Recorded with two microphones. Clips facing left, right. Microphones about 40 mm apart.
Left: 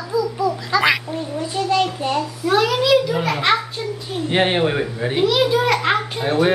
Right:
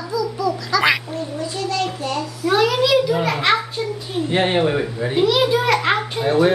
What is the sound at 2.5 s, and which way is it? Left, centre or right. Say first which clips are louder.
A child's voice: even; centre.